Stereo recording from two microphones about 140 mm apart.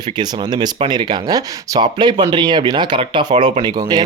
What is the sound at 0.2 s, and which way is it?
Speech, 30° right (ahead or behind).